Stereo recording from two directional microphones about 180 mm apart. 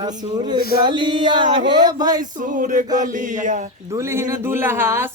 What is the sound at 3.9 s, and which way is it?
Speech, 15° right (ahead or behind).